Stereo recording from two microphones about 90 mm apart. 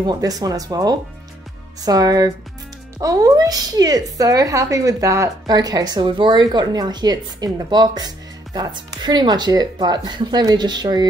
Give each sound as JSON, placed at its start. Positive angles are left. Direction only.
{"t": 0.0, "sound": "a woman's voice", "side_deg": -50}